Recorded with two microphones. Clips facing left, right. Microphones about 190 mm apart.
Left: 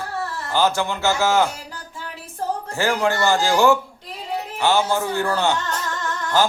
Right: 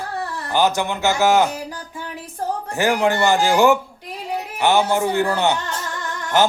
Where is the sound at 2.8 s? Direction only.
15° right (ahead or behind).